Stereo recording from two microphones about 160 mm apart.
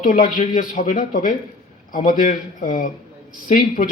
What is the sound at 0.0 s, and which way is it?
Speech, 55° left (ahead or behind).